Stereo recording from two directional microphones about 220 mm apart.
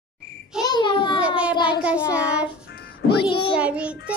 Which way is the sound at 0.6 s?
20° left (ahead or behind).